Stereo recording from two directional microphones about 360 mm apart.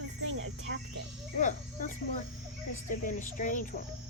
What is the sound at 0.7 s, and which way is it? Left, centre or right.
Cricket, right.